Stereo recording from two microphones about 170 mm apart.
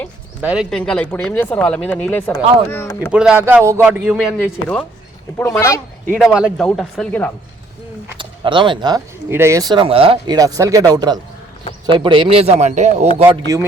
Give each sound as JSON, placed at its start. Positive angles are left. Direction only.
{"t": 0.4, "sound": "speech", "side_deg": -5}
{"t": 3.1, "sound": "speech", "side_deg": -5}
{"t": 5.4, "sound": "speech", "side_deg": 15}
{"t": 6.1, "sound": "speech", "side_deg": -5}
{"t": 8.2, "sound": "speech", "side_deg": -30}
{"t": 9.3, "sound": "speech", "side_deg": -15}
{"t": 10.3, "sound": "a man's voice", "side_deg": -20}
{"t": 13.3, "sound": "speech", "side_deg": -20}